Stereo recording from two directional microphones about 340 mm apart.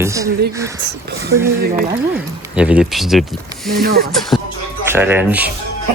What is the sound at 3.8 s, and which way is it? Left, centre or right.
Speech, right.